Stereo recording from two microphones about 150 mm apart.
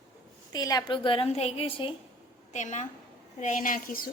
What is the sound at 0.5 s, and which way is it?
A woman's voice, 25° left (ahead or behind).